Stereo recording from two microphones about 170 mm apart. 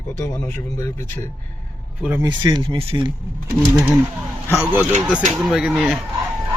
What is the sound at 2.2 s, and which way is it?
Speech, 25° right (ahead or behind).